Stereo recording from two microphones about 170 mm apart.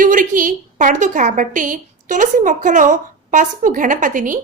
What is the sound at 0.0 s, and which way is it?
A woman's voice, 50° right (ahead or behind).